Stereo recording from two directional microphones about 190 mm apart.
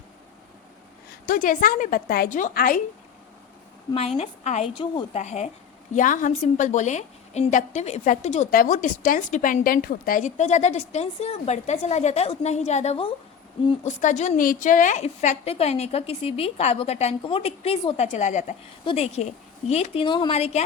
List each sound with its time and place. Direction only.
1.3 s a woman's voice: 45° left (ahead or behind)
4.2 s a woman's voice: 35° left (ahead or behind)